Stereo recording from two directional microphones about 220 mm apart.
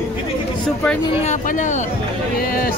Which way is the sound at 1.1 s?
30° left (ahead or behind).